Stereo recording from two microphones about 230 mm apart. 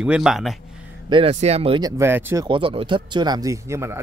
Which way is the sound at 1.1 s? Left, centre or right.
Right.